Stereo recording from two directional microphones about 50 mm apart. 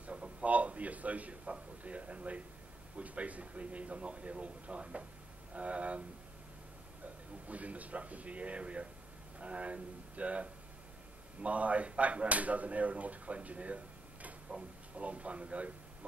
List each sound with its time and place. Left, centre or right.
0.0 s a sound: right
3.0 s speech: right
7.4 s a man's voice: right